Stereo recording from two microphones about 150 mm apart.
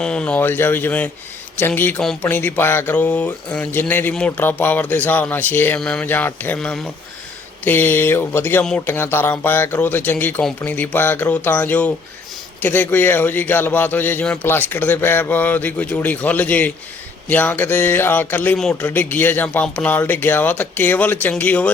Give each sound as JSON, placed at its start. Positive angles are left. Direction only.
{"t": 0.0, "sound": "a man's voice", "side_deg": 5}
{"t": 18.5, "sound": "a man's voice", "side_deg": 0}
{"t": 18.8, "sound": "a man's voice", "side_deg": 10}